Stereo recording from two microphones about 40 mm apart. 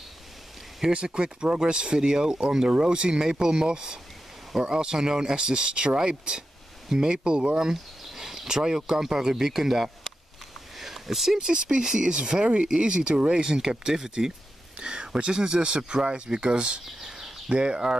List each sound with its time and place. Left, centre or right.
0.9 s speech: right
7.7 s speech: centre
14.8 s speech: right
17.1 s a sound: centre
17.6 s speech: right